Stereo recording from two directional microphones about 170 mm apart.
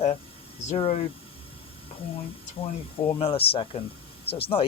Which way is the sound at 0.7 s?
40° left (ahead or behind).